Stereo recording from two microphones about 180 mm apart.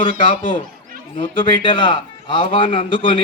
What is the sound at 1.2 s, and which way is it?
A man's voice, 25° left (ahead or behind).